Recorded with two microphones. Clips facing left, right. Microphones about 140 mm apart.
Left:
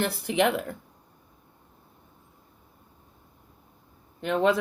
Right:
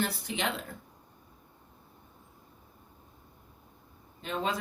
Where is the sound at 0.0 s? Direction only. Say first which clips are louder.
Left 8 dB; 65° left (ahead or behind).